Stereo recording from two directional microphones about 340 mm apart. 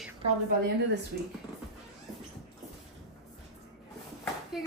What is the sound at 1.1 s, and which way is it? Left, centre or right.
Speech, right.